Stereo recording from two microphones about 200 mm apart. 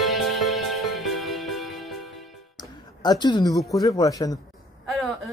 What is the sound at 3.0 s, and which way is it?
Speech, 20° left (ahead or behind).